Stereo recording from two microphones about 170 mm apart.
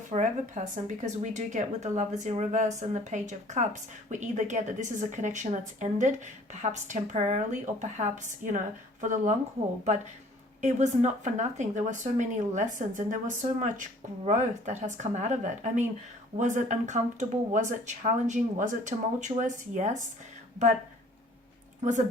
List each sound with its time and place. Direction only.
0.1 s a woman's voice: 45° right (ahead or behind)
10.6 s a woman's voice: 45° right (ahead or behind)